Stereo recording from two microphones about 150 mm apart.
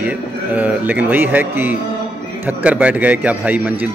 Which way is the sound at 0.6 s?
10° right (ahead or behind).